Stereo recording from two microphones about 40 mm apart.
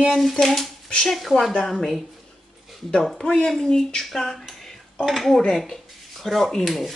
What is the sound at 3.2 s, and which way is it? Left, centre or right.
A woman's voice, centre.